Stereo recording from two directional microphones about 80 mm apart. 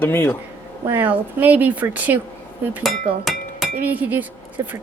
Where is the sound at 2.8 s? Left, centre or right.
Centre.